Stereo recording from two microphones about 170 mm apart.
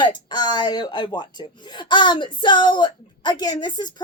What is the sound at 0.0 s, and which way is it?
Speech, 25° left (ahead or behind).